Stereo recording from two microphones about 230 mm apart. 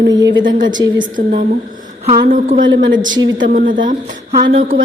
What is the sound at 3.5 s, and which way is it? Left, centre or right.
Speech, right.